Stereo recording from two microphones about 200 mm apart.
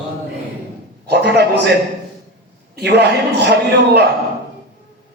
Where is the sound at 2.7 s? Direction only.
55° right (ahead or behind).